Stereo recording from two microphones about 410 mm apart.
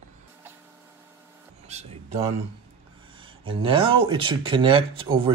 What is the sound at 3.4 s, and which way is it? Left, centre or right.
Speech, centre.